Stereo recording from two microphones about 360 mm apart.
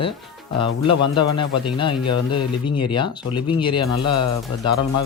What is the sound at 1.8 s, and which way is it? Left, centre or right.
Speech, centre.